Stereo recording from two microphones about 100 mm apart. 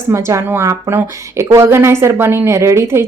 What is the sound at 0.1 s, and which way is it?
A woman's voice, 30° right (ahead or behind).